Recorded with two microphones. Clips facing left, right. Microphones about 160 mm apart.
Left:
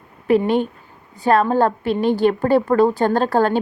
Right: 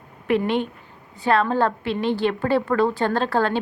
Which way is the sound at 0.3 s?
40° left (ahead or behind).